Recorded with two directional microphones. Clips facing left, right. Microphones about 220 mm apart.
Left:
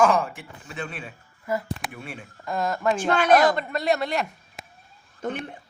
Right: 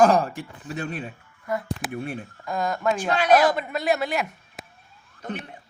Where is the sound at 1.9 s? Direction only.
40° right (ahead or behind).